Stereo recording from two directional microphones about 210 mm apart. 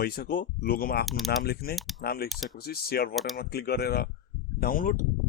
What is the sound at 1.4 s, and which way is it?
Speech, 50° left (ahead or behind).